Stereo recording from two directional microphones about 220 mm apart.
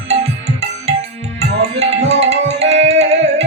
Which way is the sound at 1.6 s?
30° right (ahead or behind).